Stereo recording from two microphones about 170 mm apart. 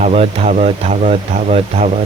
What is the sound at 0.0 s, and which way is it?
Speech, 40° right (ahead or behind).